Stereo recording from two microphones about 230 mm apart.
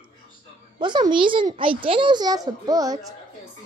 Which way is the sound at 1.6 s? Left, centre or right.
Right.